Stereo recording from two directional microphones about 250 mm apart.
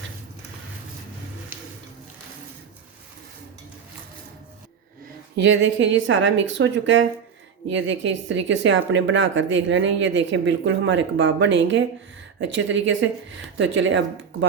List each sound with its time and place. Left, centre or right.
5.4 s speech: right